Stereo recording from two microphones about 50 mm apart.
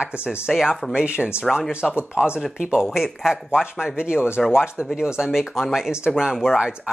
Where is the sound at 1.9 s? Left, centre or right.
Right.